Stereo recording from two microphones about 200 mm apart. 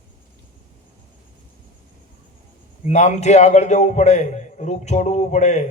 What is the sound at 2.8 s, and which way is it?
A man's voice, 35° left (ahead or behind).